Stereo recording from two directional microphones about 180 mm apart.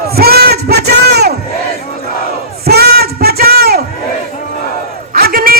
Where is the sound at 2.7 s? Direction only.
60° right (ahead or behind).